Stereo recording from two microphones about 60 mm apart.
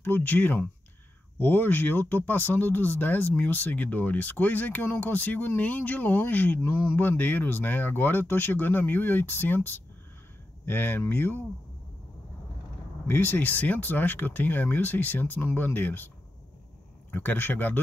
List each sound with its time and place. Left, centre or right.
0.0 s speech: left
13.0 s speech: left
17.1 s speech: left